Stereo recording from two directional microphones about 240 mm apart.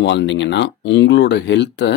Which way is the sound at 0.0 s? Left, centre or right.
Left.